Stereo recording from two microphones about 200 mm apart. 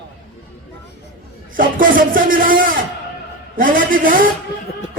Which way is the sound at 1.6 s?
45° right (ahead or behind).